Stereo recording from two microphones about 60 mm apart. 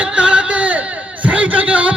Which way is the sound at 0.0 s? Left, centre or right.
Centre.